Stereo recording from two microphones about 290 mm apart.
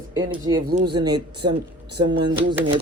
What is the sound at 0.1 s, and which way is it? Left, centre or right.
Speech, centre.